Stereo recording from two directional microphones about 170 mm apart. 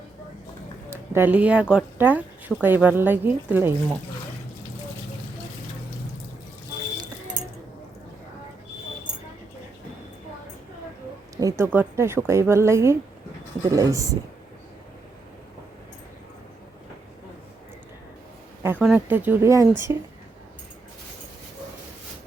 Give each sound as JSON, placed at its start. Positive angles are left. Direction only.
{"t": 0.9, "sound": "a sound", "side_deg": -15}
{"t": 1.7, "sound": "a woman's voice", "side_deg": -10}
{"t": 11.3, "sound": "a woman's voice", "side_deg": -20}
{"t": 18.6, "sound": "a woman's voice", "side_deg": -10}